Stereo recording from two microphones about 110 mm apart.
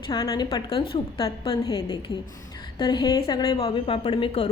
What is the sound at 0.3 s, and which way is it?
Speech, 40° left (ahead or behind).